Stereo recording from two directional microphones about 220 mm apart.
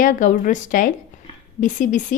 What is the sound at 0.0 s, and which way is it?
A woman's voice, 35° left (ahead or behind).